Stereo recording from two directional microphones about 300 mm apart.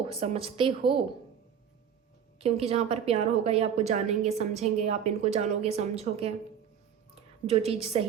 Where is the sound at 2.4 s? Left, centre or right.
Centre.